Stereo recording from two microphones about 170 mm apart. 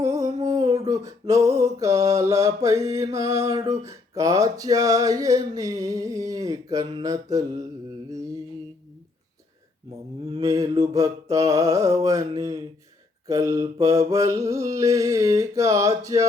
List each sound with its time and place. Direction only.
0.0 s a sound: 20° right (ahead or behind)
3.8 s speech: 20° right (ahead or behind)
10.4 s speech: 20° right (ahead or behind)